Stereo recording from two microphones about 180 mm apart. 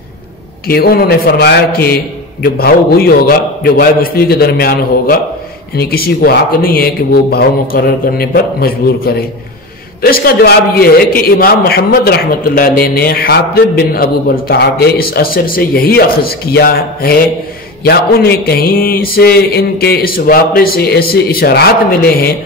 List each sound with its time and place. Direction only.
0.7 s mantra: 60° left (ahead or behind)